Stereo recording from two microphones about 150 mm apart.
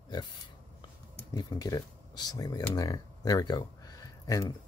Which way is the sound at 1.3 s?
25° left (ahead or behind).